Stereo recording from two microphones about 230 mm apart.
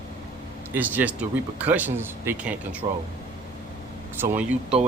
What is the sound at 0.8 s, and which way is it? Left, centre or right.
Speech, centre.